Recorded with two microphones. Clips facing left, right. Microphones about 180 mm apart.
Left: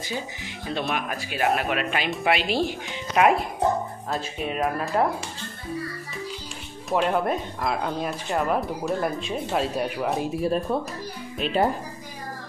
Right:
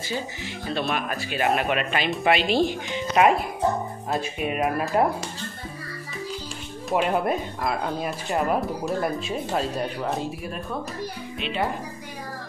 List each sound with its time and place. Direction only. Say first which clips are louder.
0.9 s speech: right 2 dB; 10° left (ahead or behind); by 5.0 s 10° right (ahead or behind)
6.9 s speech: even; 5° right (ahead or behind)
10.4 s speech: left 8 dB; 30° left (ahead or behind)
11.3 s speech: left 6 dB; 40° left (ahead or behind)